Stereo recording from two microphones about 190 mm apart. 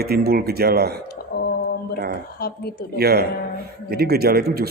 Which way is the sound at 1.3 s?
60° left (ahead or behind).